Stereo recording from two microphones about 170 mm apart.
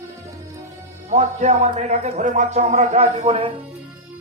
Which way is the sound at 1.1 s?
40° right (ahead or behind).